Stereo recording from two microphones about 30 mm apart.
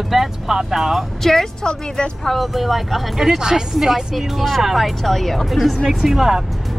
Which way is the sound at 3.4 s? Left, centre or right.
Right.